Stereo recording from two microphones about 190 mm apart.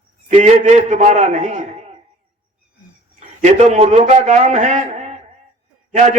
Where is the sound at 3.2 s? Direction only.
35° right (ahead or behind).